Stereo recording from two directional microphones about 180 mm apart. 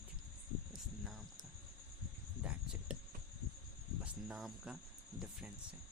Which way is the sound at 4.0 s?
Centre (ahead or behind).